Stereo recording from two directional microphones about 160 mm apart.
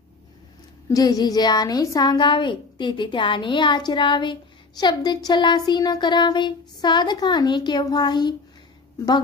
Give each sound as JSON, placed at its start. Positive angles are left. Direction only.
{"t": 0.8, "sound": "a woman's voice", "side_deg": 25}